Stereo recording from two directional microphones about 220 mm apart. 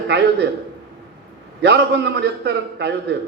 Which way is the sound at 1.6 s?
50° right (ahead or behind).